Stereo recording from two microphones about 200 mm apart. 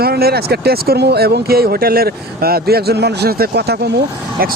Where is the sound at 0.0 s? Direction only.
50° right (ahead or behind).